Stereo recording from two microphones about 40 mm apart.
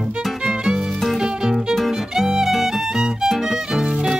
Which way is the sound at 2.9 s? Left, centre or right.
Centre.